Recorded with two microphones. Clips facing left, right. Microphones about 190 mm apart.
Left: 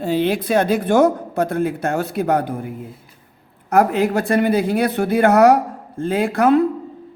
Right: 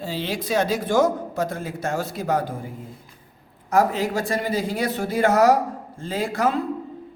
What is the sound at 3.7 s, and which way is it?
A man's voice, 60° left (ahead or behind).